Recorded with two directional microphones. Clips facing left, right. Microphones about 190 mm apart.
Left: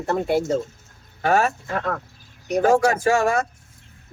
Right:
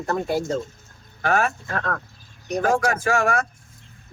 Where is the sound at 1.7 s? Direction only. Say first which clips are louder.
Left 2 dB; 10° left (ahead or behind).